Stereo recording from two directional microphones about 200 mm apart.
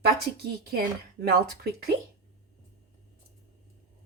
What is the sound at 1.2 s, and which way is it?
Speech, 50° right (ahead or behind).